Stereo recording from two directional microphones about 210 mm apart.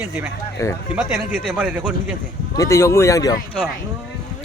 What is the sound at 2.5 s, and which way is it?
Speech, 15° left (ahead or behind).